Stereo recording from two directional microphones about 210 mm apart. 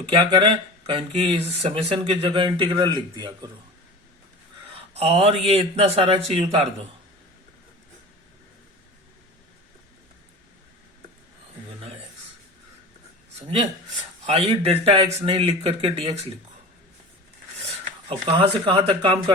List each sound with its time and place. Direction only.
0.0 s speech: 25° right (ahead or behind)
4.9 s speech: 30° right (ahead or behind)
14.3 s speech: 25° right (ahead or behind)
18.1 s speech: 25° right (ahead or behind)